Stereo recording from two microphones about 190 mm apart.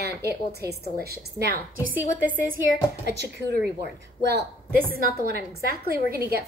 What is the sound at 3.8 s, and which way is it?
A woman's voice, 60° right (ahead or behind).